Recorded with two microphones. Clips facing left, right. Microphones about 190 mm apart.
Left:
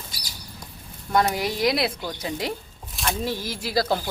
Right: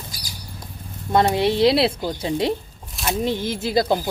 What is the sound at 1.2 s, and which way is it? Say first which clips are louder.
Speech: right 6 dB; 25° right (ahead or behind).